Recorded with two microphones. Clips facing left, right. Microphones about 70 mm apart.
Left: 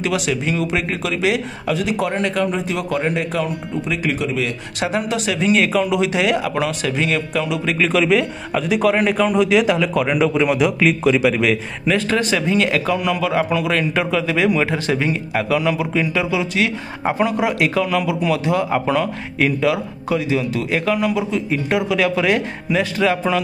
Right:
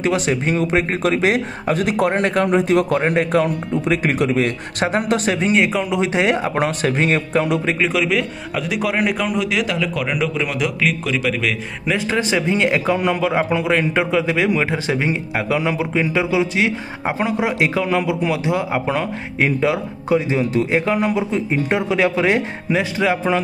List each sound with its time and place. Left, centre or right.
0.0 s a man's voice: right
5.9 s speech: right
7.8 s a man's voice: centre
11.8 s a man's voice: centre